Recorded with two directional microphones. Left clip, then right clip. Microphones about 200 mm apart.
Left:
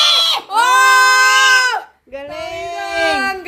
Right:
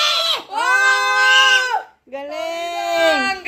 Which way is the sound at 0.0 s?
25° left (ahead or behind).